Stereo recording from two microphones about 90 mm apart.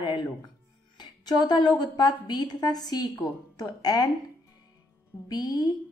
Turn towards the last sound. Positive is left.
turn(degrees=45)  # may be behind; listen again after turning